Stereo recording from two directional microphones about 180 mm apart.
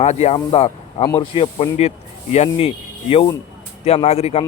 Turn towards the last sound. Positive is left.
turn(degrees=35)  # may be behind; listen again after turning